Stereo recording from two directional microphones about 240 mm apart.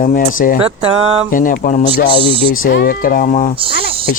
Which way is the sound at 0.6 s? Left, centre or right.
Right.